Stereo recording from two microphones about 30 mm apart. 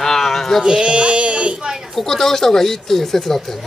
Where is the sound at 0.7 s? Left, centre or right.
Right.